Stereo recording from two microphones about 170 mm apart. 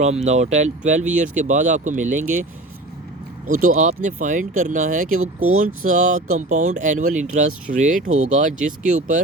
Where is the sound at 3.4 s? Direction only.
50° right (ahead or behind).